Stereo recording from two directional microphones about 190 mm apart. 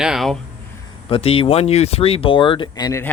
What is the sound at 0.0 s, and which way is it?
Speech, centre (ahead or behind).